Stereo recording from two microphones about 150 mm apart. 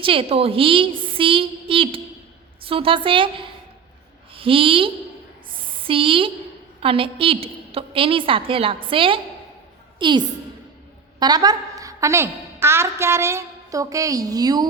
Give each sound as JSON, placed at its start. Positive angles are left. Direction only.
{"t": 0.0, "sound": "a woman's voice", "side_deg": -35}
{"t": 5.9, "sound": "a woman's voice", "side_deg": -35}